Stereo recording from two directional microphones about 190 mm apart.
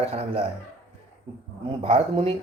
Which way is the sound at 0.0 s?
35° right (ahead or behind).